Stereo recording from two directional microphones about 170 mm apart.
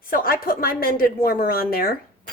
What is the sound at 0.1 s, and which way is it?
A woman's voice, 60° left (ahead or behind).